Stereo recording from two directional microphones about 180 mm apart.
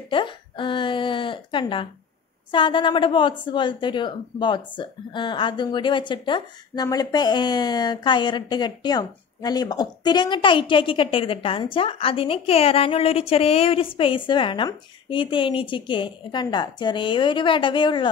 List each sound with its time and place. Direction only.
0.1 s a woman's voice: 25° left (ahead or behind)